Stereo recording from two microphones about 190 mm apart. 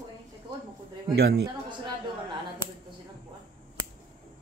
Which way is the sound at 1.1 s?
60° right (ahead or behind).